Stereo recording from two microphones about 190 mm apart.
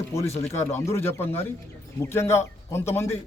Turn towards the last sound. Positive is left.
turn(degrees=15)  # may be behind; listen again after turning